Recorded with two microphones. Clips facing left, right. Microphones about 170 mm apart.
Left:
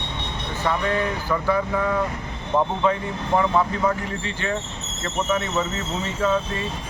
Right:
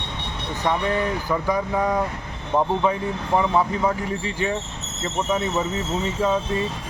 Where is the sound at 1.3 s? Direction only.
15° right (ahead or behind).